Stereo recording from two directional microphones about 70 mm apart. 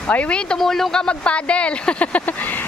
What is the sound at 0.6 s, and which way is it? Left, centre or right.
Speech, centre.